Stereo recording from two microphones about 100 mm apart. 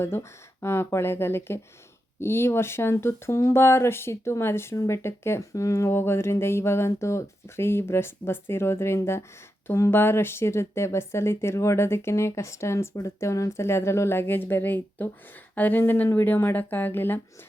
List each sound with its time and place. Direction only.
0.0 s speech: 25° left (ahead or behind)